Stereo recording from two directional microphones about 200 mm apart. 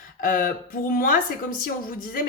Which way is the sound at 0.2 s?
45° left (ahead or behind).